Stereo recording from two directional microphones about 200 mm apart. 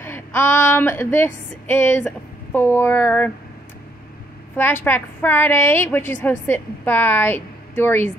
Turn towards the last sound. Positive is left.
turn(degrees=10)  # may be behind; listen again after turning